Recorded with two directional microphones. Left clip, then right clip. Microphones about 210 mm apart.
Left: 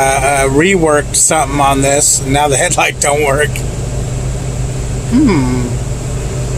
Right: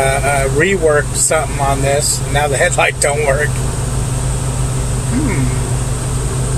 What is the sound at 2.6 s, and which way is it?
Speech, 35° left (ahead or behind).